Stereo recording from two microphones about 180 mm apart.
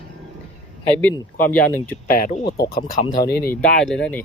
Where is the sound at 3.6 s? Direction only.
5° left (ahead or behind).